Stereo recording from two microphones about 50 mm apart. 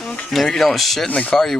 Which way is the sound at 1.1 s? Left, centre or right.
Left.